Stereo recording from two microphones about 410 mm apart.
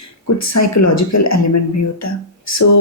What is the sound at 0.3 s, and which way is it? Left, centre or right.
Speech, left.